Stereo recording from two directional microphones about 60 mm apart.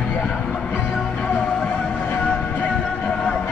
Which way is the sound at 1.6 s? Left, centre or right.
Left.